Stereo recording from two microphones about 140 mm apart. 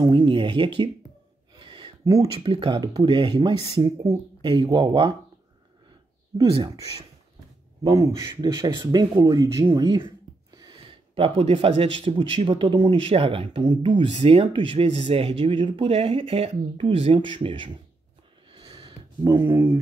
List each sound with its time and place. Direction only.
0.0 s speech: 35° right (ahead or behind)
1.5 s a sound: 35° right (ahead or behind)
2.4 s speech: 40° right (ahead or behind)
4.0 s speech: 30° right (ahead or behind)
7.8 s speech: 30° right (ahead or behind)
18.5 s a sound: 35° right (ahead or behind)
19.4 s speech: 15° right (ahead or behind)